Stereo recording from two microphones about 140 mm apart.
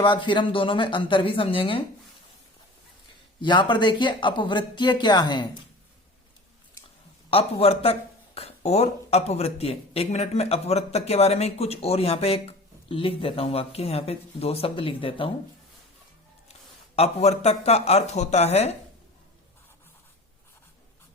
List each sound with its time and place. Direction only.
0.0 s speech: 35° left (ahead or behind)
3.4 s speech: 35° left (ahead or behind)
7.3 s speech: 45° left (ahead or behind)
16.9 s speech: 50° left (ahead or behind)